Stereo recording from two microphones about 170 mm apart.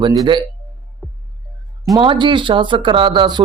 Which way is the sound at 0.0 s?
25° right (ahead or behind).